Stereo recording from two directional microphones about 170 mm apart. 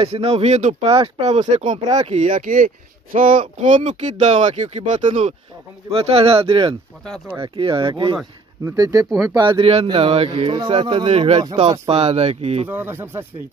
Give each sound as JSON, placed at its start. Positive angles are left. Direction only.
{"t": 0.0, "sound": "speech", "side_deg": -40}
{"t": 11.4, "sound": "speech", "side_deg": -25}
{"t": 11.9, "sound": "speech", "side_deg": -35}
{"t": 12.6, "sound": "speech", "side_deg": -10}